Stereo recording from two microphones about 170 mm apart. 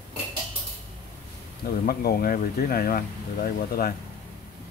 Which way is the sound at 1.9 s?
60° left (ahead or behind).